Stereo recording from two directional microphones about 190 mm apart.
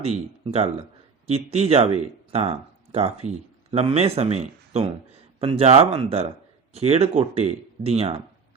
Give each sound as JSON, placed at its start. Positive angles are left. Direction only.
{"t": 0.0, "sound": "speech", "side_deg": -35}